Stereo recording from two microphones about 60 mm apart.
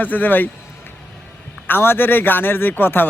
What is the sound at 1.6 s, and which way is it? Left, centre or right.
Speech, left.